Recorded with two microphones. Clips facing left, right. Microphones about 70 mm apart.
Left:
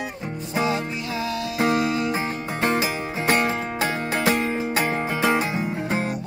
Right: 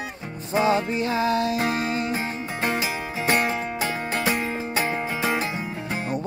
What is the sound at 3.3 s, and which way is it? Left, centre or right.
Music, left.